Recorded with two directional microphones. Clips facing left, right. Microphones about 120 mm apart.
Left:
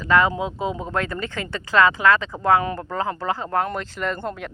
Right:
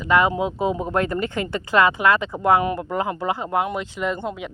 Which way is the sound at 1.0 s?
30° right (ahead or behind).